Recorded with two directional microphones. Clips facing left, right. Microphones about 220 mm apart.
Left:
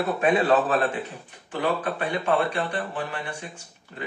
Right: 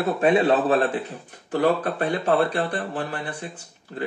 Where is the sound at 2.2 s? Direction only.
35° right (ahead or behind).